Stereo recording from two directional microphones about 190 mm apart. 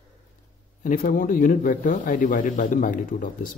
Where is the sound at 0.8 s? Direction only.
45° left (ahead or behind).